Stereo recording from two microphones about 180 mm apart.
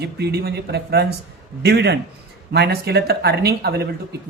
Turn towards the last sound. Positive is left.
turn(degrees=-60)  # may be behind; listen again after turning